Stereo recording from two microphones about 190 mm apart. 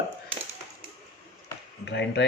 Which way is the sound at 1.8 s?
65° left (ahead or behind).